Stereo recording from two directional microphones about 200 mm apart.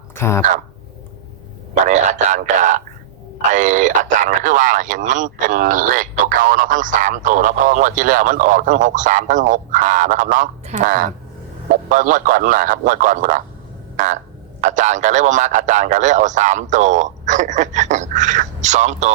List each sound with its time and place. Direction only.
0.1 s speech: 15° left (ahead or behind)
1.7 s a man's voice: 35° right (ahead or behind)
13.9 s frog: 40° right (ahead or behind)
14.6 s speech: 40° right (ahead or behind)